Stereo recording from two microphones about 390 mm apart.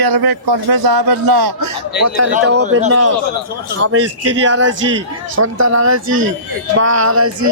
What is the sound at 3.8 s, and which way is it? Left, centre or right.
Speech, right.